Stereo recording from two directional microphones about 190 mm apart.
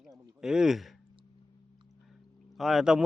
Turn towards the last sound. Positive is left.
turn(degrees=0)  # may be behind; listen again after turning